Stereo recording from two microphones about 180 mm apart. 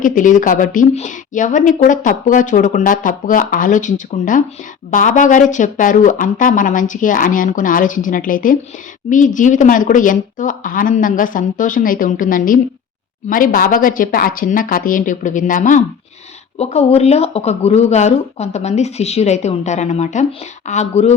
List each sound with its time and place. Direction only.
0.0 s a woman's voice: 45° left (ahead or behind)